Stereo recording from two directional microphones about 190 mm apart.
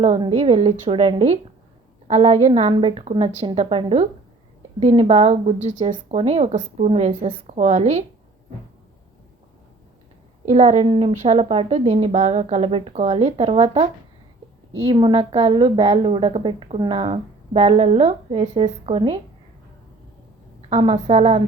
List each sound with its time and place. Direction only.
0.2 s a woman's voice: 30° right (ahead or behind)
10.4 s a woman's voice: 35° right (ahead or behind)
20.7 s a woman's voice: 30° right (ahead or behind)